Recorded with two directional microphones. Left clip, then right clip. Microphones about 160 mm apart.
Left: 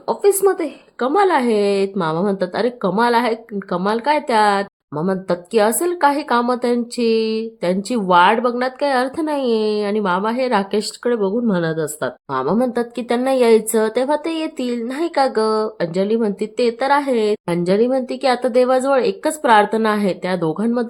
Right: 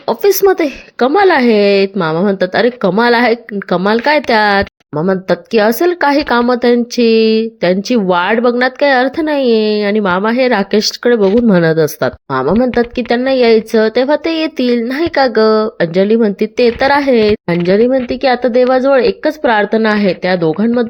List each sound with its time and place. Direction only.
0.1 s a woman's voice: 20° right (ahead or behind)